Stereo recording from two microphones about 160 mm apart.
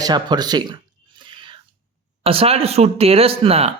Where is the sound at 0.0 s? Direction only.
25° right (ahead or behind).